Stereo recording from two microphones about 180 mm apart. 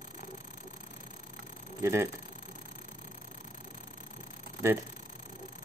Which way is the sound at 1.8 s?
15° right (ahead or behind).